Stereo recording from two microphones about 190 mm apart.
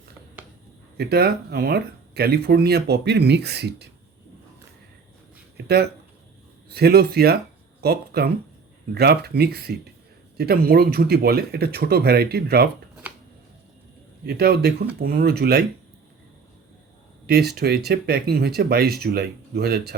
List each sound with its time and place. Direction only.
0.9 s speech: 55° right (ahead or behind)
5.5 s speech: 55° right (ahead or behind)
14.3 s speech: 55° right (ahead or behind)
17.2 s speech: 55° right (ahead or behind)